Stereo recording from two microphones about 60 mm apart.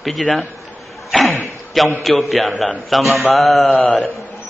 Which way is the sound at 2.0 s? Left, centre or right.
Centre.